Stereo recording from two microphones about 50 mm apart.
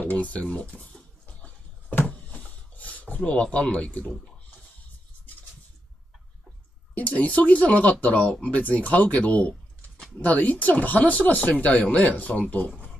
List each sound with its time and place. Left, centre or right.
0.0 s speech: left
1.2 s dog: left
2.0 s a sound: left
7.0 s speech: left